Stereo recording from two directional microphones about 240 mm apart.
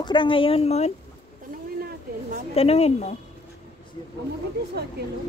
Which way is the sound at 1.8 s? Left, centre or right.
Right.